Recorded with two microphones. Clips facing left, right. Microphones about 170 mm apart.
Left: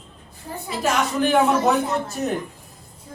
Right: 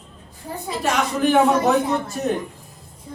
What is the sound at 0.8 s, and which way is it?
A woman's voice, centre (ahead or behind).